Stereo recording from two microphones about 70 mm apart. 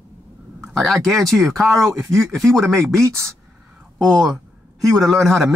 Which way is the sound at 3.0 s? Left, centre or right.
Right.